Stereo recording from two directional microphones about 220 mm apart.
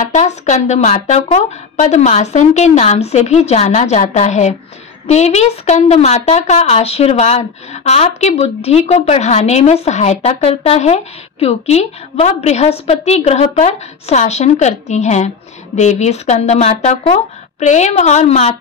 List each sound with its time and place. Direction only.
0.0 s a woman's voice: 30° left (ahead or behind)